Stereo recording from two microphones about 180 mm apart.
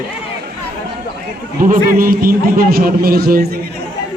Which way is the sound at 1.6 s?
45° right (ahead or behind).